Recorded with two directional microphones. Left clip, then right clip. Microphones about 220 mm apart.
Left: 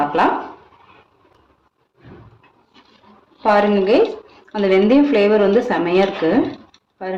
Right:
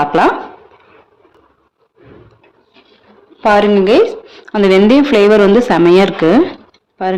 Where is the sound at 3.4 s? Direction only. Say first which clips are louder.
Right 5 dB; 50° right (ahead or behind).